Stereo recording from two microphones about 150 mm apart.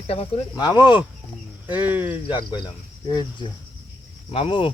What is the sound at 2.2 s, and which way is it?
Speech, 30° left (ahead or behind).